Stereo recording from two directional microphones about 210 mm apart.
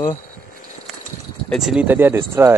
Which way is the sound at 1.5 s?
Centre (ahead or behind).